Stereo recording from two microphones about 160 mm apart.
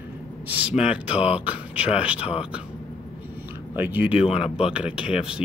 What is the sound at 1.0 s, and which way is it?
Speech, 40° left (ahead or behind).